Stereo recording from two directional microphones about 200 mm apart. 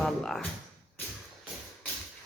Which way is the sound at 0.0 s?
Centre (ahead or behind).